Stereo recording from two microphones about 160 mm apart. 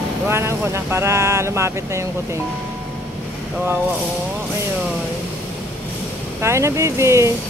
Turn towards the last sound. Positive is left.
turn(degrees=-20)  # may be behind; listen again after turning